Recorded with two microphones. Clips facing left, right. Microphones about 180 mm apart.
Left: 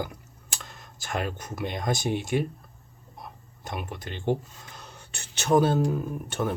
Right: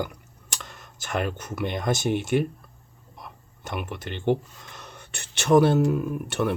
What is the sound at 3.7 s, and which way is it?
Speech, 60° right (ahead or behind).